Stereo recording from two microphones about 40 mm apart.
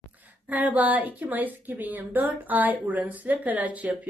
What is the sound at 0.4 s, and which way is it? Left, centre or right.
Speech, right.